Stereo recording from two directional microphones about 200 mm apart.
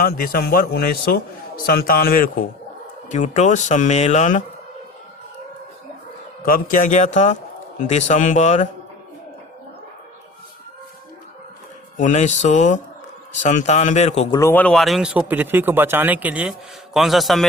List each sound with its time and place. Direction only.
0.0 s a man's voice: 50° left (ahead or behind)
6.4 s speech: 45° left (ahead or behind)
11.9 s speech: 35° left (ahead or behind)
14.3 s speech: 10° left (ahead or behind)